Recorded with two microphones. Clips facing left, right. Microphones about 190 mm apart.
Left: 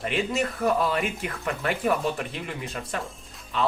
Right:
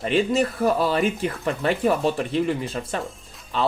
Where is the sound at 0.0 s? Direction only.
30° right (ahead or behind).